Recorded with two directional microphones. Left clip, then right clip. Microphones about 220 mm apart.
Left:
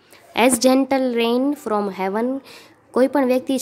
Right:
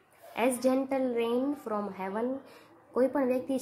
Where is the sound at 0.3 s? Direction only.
40° left (ahead or behind).